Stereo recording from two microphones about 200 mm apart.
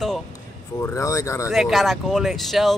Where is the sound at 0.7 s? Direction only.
15° left (ahead or behind).